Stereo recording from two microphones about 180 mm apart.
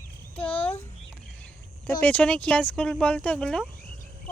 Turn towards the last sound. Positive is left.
turn(degrees=5)  # may be behind; listen again after turning